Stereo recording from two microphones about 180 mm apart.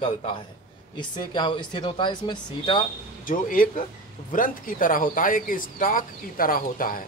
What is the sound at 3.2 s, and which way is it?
A man's voice, 50° left (ahead or behind).